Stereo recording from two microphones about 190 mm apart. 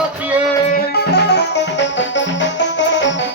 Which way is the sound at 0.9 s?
60° left (ahead or behind).